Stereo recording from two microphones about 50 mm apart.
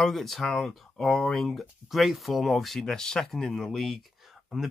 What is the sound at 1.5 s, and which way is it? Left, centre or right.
Speech, centre.